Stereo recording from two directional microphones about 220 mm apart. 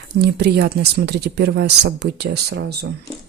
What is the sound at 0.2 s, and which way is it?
Speech, 50° right (ahead or behind).